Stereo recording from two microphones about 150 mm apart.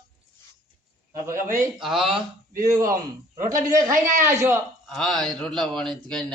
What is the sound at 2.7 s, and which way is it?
Speech, 20° right (ahead or behind).